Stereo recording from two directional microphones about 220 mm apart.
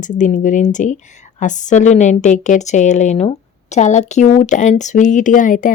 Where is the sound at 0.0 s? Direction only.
35° left (ahead or behind).